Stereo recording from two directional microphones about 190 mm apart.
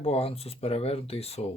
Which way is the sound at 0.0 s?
30° left (ahead or behind).